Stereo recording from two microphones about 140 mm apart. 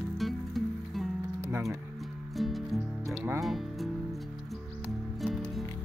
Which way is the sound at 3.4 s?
Centre (ahead or behind).